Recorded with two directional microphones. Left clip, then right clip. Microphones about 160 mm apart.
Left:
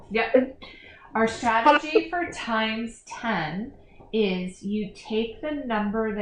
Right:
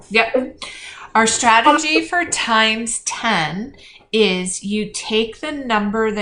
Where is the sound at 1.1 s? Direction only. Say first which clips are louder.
Right 10 dB; 30° right (ahead or behind).